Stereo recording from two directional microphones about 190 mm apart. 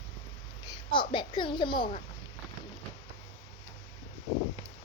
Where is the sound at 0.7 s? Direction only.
25° left (ahead or behind).